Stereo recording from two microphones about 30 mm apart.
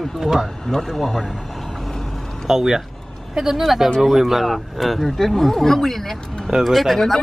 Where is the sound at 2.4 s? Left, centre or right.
Centre.